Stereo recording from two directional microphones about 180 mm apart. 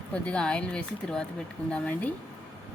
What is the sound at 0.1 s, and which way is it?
Speech, 5° left (ahead or behind).